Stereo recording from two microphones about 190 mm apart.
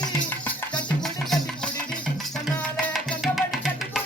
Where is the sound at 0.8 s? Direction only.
Centre (ahead or behind).